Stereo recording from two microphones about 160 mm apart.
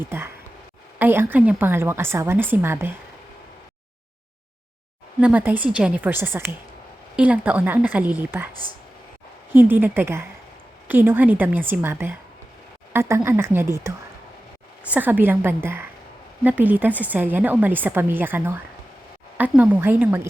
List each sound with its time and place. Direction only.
0.0 s a woman's voice: 15° right (ahead or behind)
5.2 s a woman's voice: 10° right (ahead or behind)
9.5 s a woman's voice: 10° right (ahead or behind)